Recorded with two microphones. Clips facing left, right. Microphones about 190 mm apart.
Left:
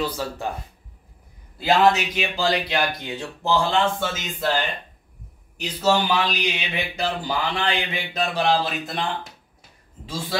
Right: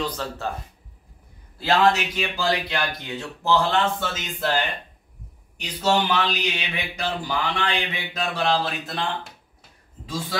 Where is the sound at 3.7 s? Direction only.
10° left (ahead or behind).